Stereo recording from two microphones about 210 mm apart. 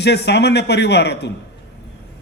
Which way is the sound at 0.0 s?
55° left (ahead or behind).